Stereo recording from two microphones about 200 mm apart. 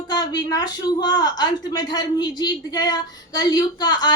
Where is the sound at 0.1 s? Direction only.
20° left (ahead or behind).